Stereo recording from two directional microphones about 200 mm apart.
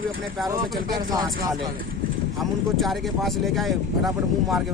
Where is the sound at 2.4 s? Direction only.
Centre (ahead or behind).